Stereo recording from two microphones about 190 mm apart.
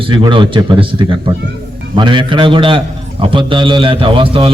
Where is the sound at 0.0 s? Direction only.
25° right (ahead or behind).